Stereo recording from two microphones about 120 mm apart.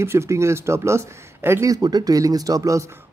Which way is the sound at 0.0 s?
20° right (ahead or behind).